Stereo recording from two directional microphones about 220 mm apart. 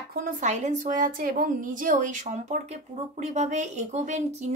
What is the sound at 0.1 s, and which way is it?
A woman's voice, 35° right (ahead or behind).